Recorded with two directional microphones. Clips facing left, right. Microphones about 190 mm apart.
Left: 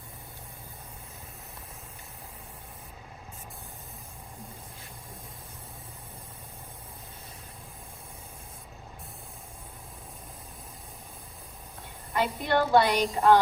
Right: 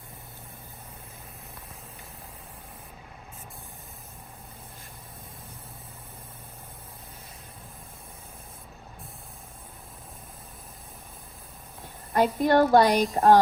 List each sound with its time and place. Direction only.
12.1 s a woman's voice: 45° right (ahead or behind)